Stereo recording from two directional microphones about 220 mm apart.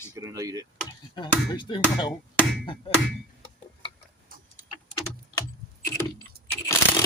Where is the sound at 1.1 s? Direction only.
20° left (ahead or behind).